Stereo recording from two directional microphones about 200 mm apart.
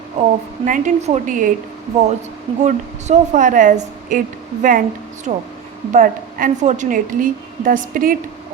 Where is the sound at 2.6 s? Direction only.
40° right (ahead or behind).